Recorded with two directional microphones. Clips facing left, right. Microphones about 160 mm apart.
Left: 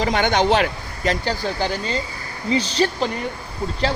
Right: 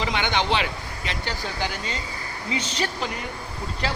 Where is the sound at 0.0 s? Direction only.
45° left (ahead or behind).